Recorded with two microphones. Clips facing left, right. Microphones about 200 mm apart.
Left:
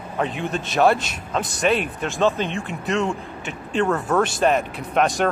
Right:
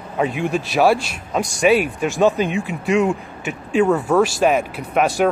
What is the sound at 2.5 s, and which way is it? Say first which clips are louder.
Speech: right 5 dB; centre (ahead or behind).